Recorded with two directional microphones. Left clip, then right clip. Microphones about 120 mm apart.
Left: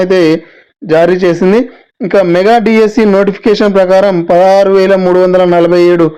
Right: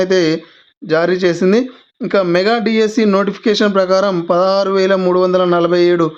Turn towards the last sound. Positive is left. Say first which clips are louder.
# left 6 dB
turn(degrees=35)  # may be behind; listen again after turning